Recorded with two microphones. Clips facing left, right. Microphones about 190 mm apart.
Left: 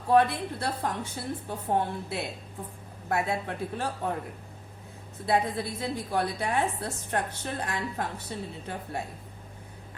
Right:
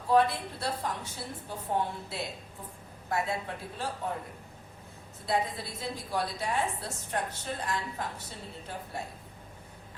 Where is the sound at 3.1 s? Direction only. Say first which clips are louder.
Left 3 dB; 60° left (ahead or behind).